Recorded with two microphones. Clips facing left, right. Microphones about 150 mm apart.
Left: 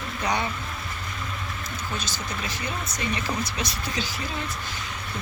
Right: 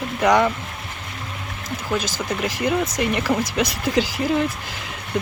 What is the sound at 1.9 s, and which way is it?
Speech, 90° right.